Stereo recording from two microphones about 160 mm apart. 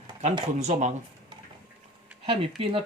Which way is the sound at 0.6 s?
50° right (ahead or behind).